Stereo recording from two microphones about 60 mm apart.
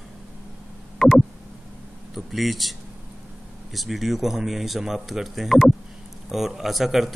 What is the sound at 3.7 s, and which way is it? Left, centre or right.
Speech, centre.